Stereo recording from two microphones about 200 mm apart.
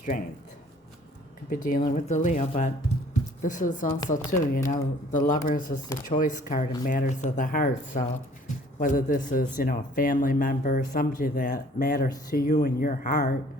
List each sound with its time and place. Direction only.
0.1 s speech: 40° left (ahead or behind)
1.5 s speech: 45° left (ahead or behind)